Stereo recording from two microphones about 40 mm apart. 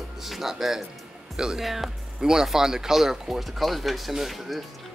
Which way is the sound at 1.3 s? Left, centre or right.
Centre.